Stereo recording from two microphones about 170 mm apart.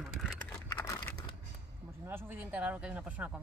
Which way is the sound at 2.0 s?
15° right (ahead or behind).